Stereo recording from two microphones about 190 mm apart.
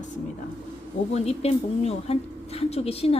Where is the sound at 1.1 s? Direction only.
30° left (ahead or behind).